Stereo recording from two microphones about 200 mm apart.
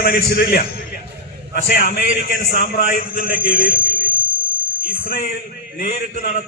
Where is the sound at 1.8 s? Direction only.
50° left (ahead or behind).